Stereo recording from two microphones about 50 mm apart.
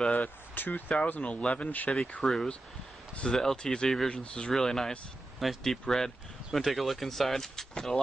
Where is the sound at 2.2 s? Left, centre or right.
Centre.